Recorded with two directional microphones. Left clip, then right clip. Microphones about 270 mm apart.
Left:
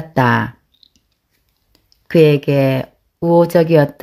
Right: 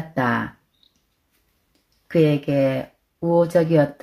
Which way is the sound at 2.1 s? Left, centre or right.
Left.